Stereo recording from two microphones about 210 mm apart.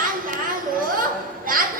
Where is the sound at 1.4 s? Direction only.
40° right (ahead or behind).